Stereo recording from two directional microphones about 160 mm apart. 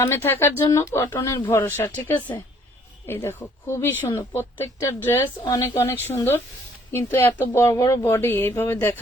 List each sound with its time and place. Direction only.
0.0 s a woman's voice: 15° left (ahead or behind)